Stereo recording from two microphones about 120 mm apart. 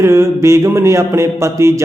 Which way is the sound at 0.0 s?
20° right (ahead or behind).